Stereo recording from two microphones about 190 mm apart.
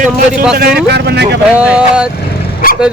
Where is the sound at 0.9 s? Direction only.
60° right (ahead or behind).